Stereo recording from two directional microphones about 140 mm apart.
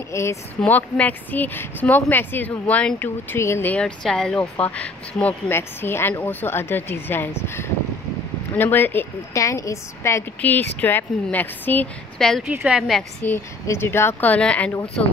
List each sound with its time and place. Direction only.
0.1 s speech: 20° left (ahead or behind); by 12.4 s 5° left (ahead or behind)
12.4 s a woman's voice: 10° right (ahead or behind)
13.2 s speech: 15° left (ahead or behind)